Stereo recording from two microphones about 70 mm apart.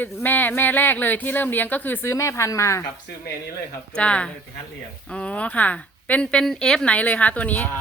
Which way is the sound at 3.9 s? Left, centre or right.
Centre.